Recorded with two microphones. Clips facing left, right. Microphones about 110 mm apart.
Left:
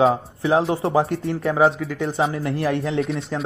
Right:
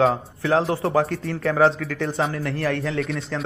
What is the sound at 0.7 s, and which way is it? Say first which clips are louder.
Speech: left 1 dB; 25° left (ahead or behind).